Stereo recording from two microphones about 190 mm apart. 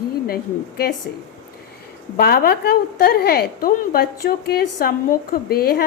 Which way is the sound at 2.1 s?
55° left (ahead or behind).